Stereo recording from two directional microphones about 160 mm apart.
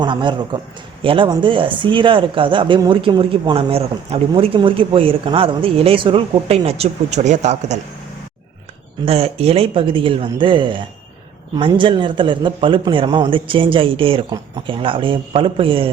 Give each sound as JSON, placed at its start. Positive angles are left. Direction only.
{"t": 0.0, "sound": "a man's voice", "side_deg": -30}
{"t": 9.0, "sound": "speech", "side_deg": -40}